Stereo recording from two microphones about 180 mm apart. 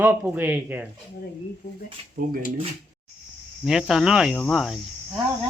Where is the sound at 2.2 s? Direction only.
55° right (ahead or behind).